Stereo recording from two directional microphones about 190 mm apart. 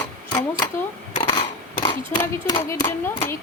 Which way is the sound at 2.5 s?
20° left (ahead or behind).